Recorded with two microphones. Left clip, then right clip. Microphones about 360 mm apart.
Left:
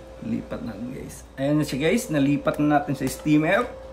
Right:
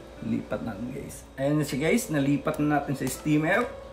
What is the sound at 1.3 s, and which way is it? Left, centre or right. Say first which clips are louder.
Speech: left 3 dB; centre.